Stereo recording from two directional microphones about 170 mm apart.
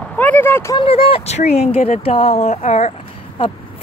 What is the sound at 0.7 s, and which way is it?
Speech, 35° left (ahead or behind).